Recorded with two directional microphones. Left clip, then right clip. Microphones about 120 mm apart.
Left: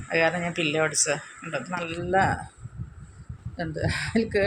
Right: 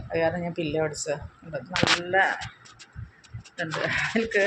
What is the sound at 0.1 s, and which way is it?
Speech, centre (ahead or behind).